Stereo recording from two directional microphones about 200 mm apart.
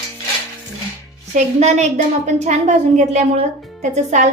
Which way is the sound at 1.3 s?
35° right (ahead or behind).